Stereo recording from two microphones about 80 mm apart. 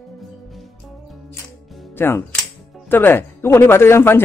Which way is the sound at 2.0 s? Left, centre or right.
Left.